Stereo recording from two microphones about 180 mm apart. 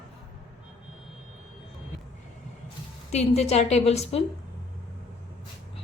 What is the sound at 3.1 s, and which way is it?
A woman's voice, 35° left (ahead or behind).